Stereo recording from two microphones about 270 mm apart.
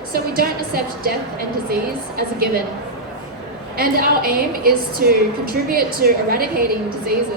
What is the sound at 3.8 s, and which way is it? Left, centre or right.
A woman's voice, right.